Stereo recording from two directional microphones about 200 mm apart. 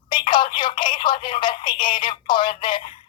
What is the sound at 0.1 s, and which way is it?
Speech, 25° left (ahead or behind).